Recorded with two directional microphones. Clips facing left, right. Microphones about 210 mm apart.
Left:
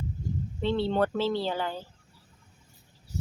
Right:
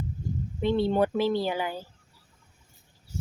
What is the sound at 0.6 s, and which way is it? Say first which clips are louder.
Speech: right 2 dB; 15° right (ahead or behind).